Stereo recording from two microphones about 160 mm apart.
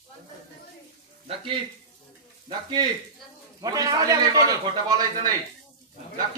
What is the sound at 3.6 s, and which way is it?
A man's voice, 25° right (ahead or behind).